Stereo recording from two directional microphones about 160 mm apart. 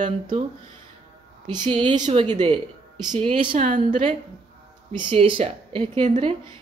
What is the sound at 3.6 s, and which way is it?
Speech, 50° right (ahead or behind).